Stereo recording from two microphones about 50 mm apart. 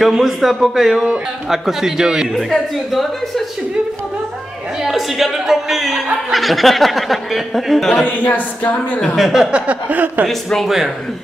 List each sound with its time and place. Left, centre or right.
0.2 s a man's voice: centre
2.3 s speech: centre
4.8 s speech: centre
8.0 s speech: left
9.1 s speech: centre
9.5 s a sound: right
10.2 s speech: centre